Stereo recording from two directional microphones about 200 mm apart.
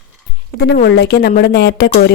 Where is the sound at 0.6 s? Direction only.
55° left (ahead or behind).